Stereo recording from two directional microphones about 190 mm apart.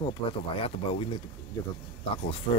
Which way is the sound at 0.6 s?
30° left (ahead or behind).